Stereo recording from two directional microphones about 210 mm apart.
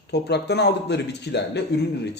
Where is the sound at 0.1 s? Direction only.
55° left (ahead or behind).